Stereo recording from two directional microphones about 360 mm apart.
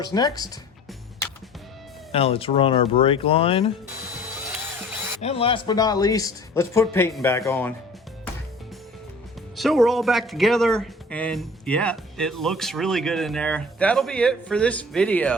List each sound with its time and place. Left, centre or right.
0.0 s speech: centre
2.1 s speech: centre
5.2 s speech: centre
9.6 s speech: centre